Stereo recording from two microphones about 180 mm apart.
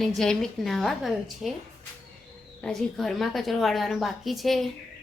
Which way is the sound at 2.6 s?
5° left (ahead or behind).